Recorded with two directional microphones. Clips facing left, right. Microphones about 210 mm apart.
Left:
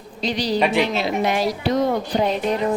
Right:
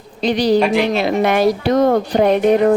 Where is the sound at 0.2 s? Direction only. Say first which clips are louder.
Right 7 dB; 55° right (ahead or behind).